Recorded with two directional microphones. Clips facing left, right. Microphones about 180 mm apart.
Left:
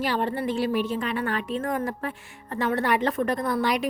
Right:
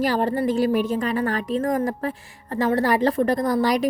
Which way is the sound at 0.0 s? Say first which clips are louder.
Right 5 dB; 40° right (ahead or behind).